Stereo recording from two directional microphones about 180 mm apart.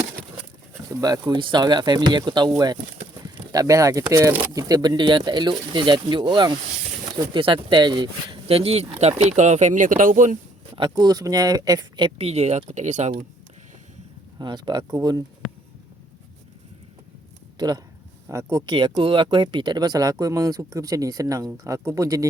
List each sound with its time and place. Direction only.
0.9 s speech: 20° right (ahead or behind); by 10.3 s 45° right (ahead or behind)
10.8 s speech: 25° right (ahead or behind); by 13.2 s 40° right (ahead or behind)
14.3 s speech: 25° right (ahead or behind)
17.6 s speech: 25° right (ahead or behind)